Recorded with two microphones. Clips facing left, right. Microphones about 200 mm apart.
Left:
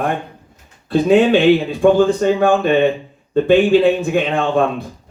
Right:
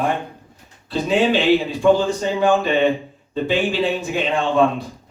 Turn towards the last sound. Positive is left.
turn(degrees=55)  # may be behind; listen again after turning